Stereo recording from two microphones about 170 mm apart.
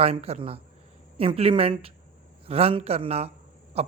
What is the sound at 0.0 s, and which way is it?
Speech, 35° right (ahead or behind).